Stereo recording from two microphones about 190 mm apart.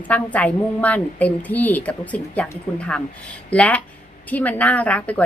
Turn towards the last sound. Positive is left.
turn(degrees=5)  # may be behind; listen again after turning